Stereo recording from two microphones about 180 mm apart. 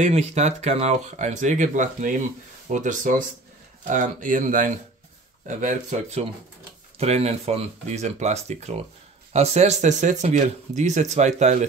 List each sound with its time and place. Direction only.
0.0 s speech: 40° right (ahead or behind)